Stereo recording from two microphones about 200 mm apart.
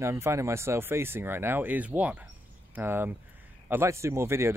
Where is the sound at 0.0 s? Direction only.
15° right (ahead or behind).